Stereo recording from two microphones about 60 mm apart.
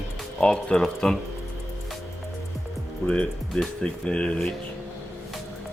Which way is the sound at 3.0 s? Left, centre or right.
Left.